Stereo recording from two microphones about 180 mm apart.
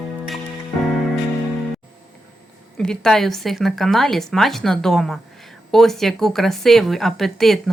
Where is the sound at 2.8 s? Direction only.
5° left (ahead or behind).